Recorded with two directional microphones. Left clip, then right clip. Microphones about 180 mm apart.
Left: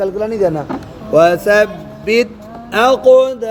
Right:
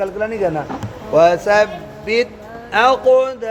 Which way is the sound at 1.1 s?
40° left (ahead or behind).